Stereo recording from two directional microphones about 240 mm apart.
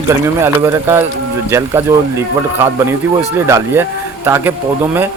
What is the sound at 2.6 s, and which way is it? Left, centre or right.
A man's voice, centre.